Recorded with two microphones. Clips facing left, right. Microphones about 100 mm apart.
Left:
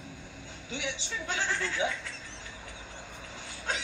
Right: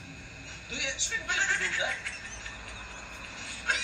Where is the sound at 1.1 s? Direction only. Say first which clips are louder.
Right 1 dB; 40° left (ahead or behind).